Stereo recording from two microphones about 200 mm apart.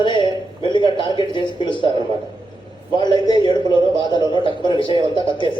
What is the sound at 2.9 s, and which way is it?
A man's voice, 20° left (ahead or behind).